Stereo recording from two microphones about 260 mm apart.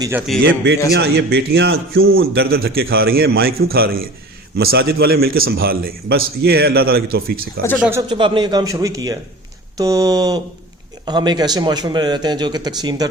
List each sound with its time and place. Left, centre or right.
0.0 s speech: centre
0.4 s a man's voice: right
7.8 s a man's voice: centre